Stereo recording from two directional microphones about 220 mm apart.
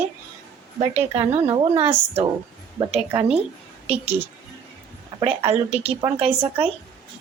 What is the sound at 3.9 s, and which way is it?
Speech, 25° right (ahead or behind).